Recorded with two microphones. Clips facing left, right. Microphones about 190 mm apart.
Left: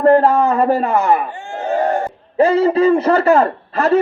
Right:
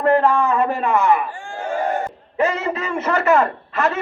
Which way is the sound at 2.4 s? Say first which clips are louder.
Left 9 dB; 35° left (ahead or behind).